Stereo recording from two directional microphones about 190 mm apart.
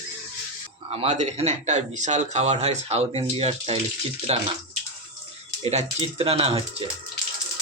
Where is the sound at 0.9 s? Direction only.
30° right (ahead or behind).